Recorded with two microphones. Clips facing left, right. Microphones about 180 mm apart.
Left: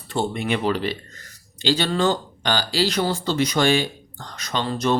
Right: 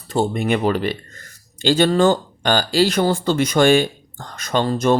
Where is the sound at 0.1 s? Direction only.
45° right (ahead or behind).